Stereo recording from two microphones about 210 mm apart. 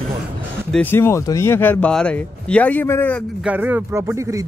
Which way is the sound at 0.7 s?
5° left (ahead or behind).